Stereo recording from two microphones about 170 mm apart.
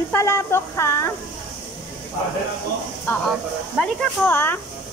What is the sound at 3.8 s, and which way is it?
Speech, 10° left (ahead or behind).